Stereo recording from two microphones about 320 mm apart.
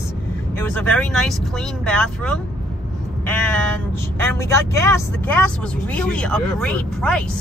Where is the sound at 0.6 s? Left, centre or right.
Centre.